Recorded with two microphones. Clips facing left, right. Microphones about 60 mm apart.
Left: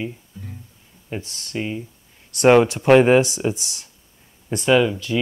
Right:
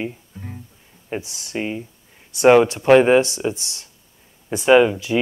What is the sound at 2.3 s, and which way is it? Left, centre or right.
Speech, centre.